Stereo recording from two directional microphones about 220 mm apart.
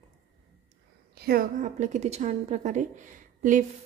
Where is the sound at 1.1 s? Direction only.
45° right (ahead or behind).